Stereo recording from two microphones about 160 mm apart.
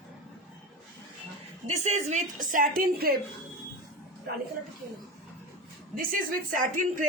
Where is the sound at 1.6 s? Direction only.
45° right (ahead or behind); by 3.2 s 65° right (ahead or behind).